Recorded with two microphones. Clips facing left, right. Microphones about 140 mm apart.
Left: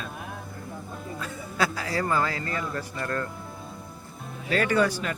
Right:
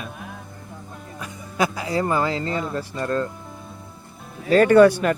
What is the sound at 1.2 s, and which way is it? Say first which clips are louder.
A man's voice: right 4 dB; 20° right (ahead or behind).